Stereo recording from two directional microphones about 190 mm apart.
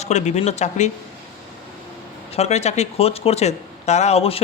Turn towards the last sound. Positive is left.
turn(degrees=30)  # may be behind; listen again after turning